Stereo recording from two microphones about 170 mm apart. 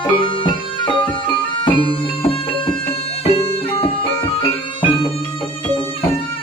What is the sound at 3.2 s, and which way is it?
Music, 35° left (ahead or behind).